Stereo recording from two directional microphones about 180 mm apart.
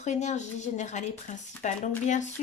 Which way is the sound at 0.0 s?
40° left (ahead or behind).